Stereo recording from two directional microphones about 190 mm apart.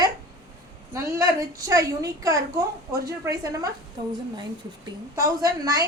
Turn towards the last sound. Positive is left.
turn(degrees=-20)  # may be behind; listen again after turning